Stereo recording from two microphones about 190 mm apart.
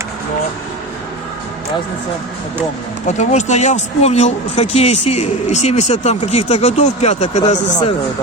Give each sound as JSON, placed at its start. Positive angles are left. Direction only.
{"t": 3.1, "sound": "speech", "side_deg": 40}